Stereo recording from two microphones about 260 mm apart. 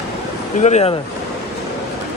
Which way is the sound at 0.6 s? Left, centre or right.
Left.